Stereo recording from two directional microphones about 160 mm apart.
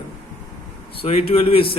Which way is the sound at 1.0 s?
35° left (ahead or behind).